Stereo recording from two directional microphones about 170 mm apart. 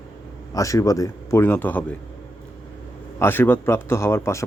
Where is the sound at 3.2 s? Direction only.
10° left (ahead or behind).